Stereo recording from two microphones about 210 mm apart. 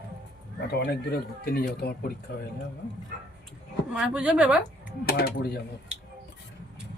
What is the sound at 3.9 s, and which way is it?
A woman's voice, 5° right (ahead or behind).